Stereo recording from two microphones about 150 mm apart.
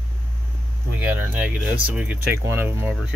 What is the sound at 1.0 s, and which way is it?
Speech, 10° right (ahead or behind).